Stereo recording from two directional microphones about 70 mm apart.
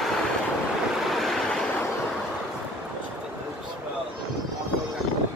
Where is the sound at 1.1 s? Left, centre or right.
Centre.